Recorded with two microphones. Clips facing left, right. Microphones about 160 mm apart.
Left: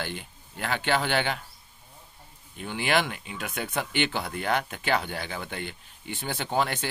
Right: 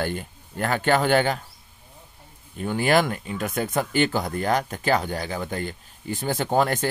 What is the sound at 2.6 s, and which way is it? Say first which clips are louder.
Speech: right 6 dB; 45° right (ahead or behind).